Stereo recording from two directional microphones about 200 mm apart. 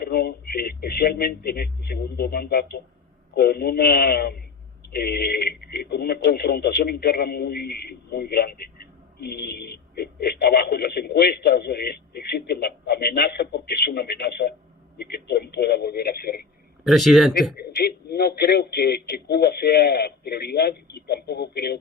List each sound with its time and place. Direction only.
0.0 s a man's voice: 50° left (ahead or behind)
16.8 s speech: centre (ahead or behind)
17.6 s speech: 50° left (ahead or behind)